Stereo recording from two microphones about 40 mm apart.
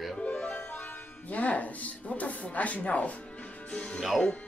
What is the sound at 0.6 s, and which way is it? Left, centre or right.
Music, left.